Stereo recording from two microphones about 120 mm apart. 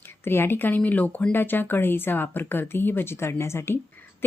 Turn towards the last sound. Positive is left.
turn(degrees=20)  # may be behind; listen again after turning